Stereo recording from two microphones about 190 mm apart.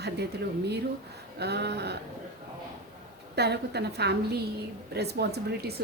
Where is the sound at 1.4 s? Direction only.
60° right (ahead or behind).